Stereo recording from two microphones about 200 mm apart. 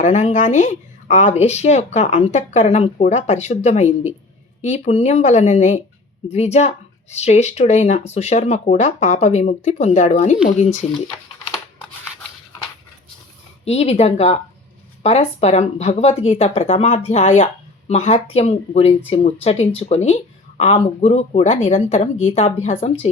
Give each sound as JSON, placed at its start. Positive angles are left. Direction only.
{"t": 0.0, "sound": "speech", "side_deg": 35}
{"t": 13.7, "sound": "speech", "side_deg": 30}